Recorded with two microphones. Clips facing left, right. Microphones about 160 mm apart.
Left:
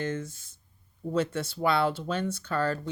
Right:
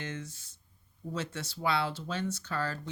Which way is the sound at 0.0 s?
50° left (ahead or behind).